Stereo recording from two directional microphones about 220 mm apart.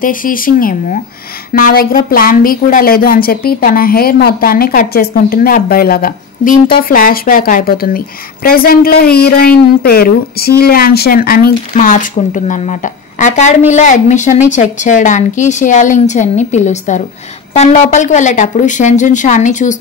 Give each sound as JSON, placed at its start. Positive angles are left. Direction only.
{"t": 0.0, "sound": "a woman's voice", "side_deg": 40}